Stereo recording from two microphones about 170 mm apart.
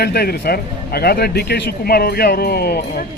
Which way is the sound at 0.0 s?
70° left (ahead or behind).